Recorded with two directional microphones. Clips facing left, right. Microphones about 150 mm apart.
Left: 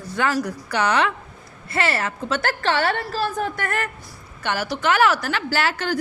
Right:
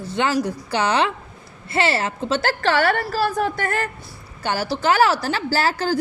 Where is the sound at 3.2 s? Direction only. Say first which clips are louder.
Right 3 dB; 70° right (ahead or behind).